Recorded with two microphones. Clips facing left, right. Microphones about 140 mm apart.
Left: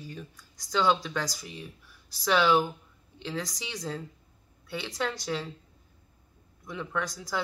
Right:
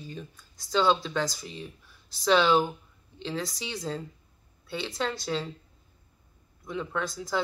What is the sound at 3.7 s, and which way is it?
Speech, 15° right (ahead or behind).